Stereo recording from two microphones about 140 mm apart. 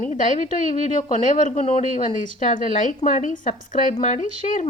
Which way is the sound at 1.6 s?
40° left (ahead or behind).